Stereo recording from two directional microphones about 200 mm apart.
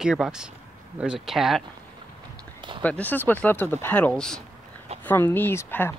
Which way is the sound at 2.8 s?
10° left (ahead or behind).